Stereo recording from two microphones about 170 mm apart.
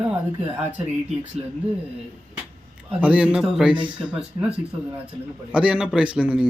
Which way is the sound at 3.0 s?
10° right (ahead or behind).